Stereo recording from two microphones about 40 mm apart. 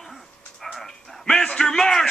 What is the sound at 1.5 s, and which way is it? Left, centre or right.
Speech, centre.